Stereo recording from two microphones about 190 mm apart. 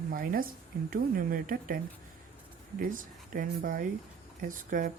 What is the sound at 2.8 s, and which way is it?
Speech, 45° right (ahead or behind).